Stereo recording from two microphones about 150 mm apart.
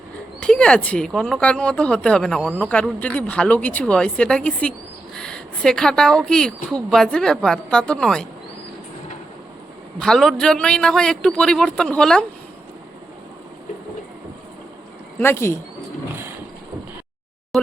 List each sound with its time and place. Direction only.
0.4 s a woman's voice: 5° left (ahead or behind)
10.0 s a woman's voice: 5° left (ahead or behind)
15.2 s a woman's voice: 15° left (ahead or behind)
17.5 s a sound: centre (ahead or behind)